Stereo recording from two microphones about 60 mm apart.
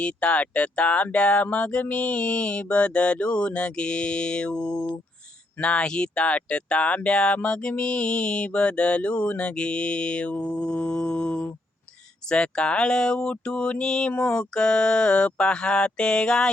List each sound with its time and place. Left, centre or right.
0.0 s speech: left